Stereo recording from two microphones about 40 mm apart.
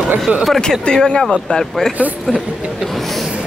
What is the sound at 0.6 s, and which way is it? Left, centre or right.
Speech, left.